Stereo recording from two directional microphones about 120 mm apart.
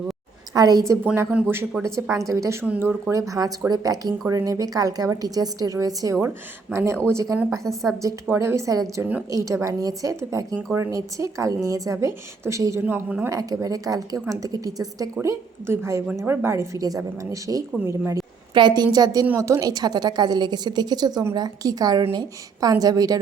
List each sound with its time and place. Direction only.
0.5 s a woman's voice: 30° right (ahead or behind)
1.0 s a woman's voice: 20° right (ahead or behind)
1.8 s a woman's voice: 25° right (ahead or behind)
7.6 s a woman's voice: centre (ahead or behind)
8.0 s speech: 20° right (ahead or behind)
12.8 s a woman's voice: 10° right (ahead or behind)
13.3 s speech: 30° right (ahead or behind)
18.5 s a woman's voice: 35° right (ahead or behind)